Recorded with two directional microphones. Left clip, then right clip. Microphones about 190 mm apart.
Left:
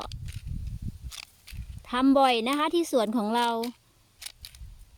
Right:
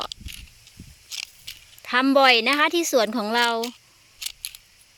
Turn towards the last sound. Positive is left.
turn(degrees=25)  # may be behind; listen again after turning